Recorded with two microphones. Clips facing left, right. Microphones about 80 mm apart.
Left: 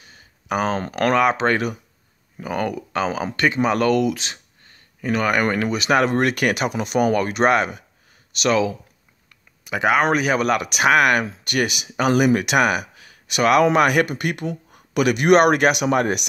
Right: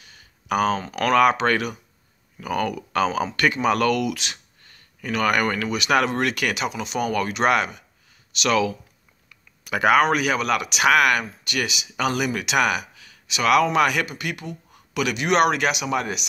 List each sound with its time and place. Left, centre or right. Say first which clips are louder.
0.0 s a sound: left 2 dB; left
1.3 s speech: left 2 dB; left
5.7 s speech: left 3 dB; left
10.0 s speech: left 3 dB; left